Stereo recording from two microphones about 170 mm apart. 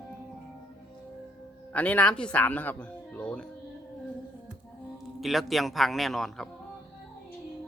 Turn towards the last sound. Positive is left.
turn(degrees=0)  # may be behind; listen again after turning